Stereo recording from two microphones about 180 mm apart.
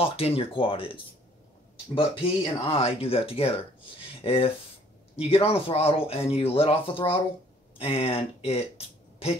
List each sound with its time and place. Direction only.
0.0 s speech: 30° left (ahead or behind)